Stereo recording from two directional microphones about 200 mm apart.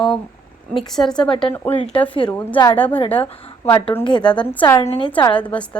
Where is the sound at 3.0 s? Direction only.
25° left (ahead or behind).